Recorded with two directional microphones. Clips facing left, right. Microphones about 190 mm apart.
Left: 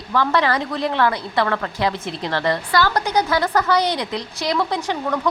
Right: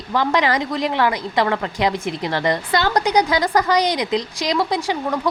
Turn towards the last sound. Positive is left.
turn(degrees=-10)  # may be behind; listen again after turning